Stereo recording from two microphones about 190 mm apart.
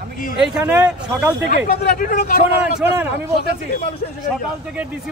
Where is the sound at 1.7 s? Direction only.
50° left (ahead or behind).